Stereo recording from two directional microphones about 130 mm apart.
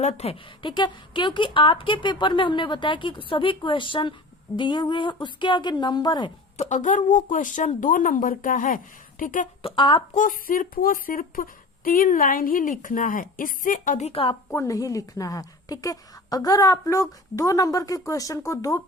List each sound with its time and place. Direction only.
0.0 s a woman's voice: 55° left (ahead or behind)
0.6 s speech: 35° left (ahead or behind)
6.6 s a woman's voice: 65° left (ahead or behind); by 9.5 s 90° left
9.6 s speech: 40° left (ahead or behind)
10.2 s a woman's voice: 90° left
14.1 s a woman's voice: 45° left (ahead or behind)
14.5 s a woman's voice: 25° left (ahead or behind)